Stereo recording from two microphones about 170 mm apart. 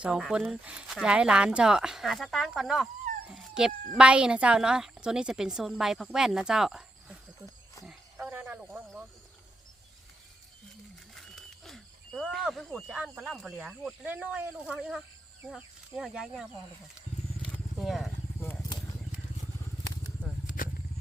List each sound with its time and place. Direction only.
0.0 s speech: 5° right (ahead or behind)
7.9 s cricket: 10° right (ahead or behind)
11.1 s speech: centre (ahead or behind)
17.7 s speech: centre (ahead or behind)
18.3 s wild animals: 15° left (ahead or behind)
20.2 s vehicle: 10° right (ahead or behind)
20.6 s vehicle: 55° left (ahead or behind)